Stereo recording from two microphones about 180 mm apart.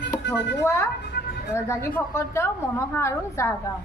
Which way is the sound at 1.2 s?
65° left (ahead or behind).